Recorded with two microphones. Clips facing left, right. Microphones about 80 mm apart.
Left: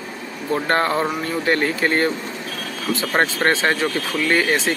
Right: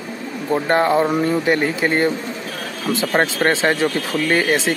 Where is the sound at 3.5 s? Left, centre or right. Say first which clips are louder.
Right 2 dB; right.